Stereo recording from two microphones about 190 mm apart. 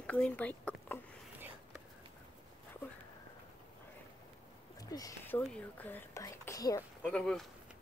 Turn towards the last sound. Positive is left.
turn(degrees=5)  # may be behind; listen again after turning